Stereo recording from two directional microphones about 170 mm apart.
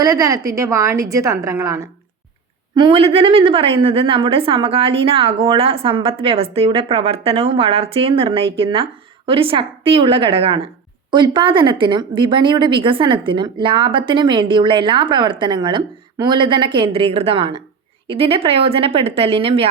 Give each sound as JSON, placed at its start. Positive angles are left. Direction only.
{"t": 0.0, "sound": "a woman's voice", "side_deg": -20}
{"t": 2.7, "sound": "a woman's voice", "side_deg": -30}